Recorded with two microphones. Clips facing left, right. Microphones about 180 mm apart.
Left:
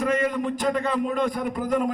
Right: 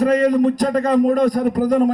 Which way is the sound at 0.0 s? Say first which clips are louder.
Right 9 dB; 35° right (ahead or behind).